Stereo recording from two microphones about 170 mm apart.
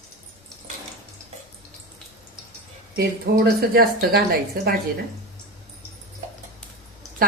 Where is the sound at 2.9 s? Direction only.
65° right (ahead or behind).